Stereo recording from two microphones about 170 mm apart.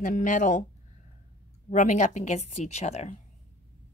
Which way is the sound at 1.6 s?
45° left (ahead or behind).